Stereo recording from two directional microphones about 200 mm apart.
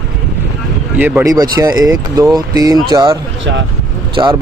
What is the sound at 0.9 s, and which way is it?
Speech, 10° right (ahead or behind).